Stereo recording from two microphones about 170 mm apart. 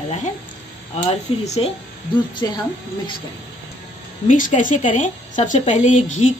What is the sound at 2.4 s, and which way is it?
Speech, 20° left (ahead or behind).